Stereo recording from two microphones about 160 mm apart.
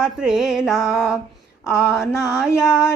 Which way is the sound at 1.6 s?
20° left (ahead or behind).